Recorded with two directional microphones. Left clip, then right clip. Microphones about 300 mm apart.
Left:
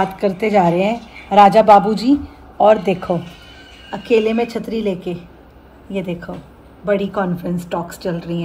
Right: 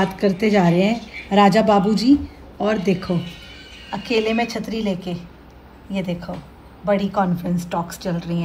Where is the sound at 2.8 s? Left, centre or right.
Right.